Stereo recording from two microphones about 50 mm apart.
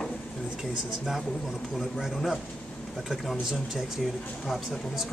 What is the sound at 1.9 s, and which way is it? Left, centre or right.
Speech, centre.